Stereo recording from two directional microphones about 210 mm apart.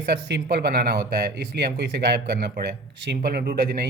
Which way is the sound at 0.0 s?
55° right (ahead or behind).